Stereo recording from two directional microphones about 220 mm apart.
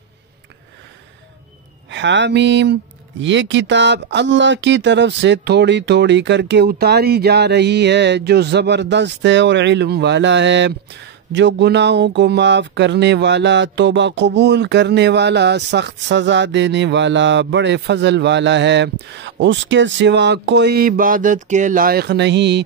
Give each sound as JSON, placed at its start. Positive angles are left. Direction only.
{"t": 1.9, "sound": "speech", "side_deg": -55}